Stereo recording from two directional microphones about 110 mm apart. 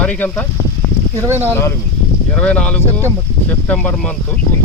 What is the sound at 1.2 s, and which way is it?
Speech, 25° right (ahead or behind).